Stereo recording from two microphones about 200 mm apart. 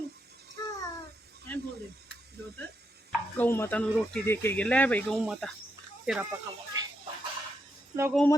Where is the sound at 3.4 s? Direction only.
10° left (ahead or behind).